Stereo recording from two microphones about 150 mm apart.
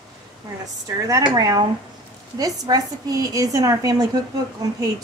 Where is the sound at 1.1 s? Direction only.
25° right (ahead or behind).